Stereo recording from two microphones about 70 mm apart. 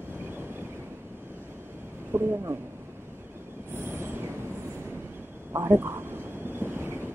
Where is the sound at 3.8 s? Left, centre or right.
Right.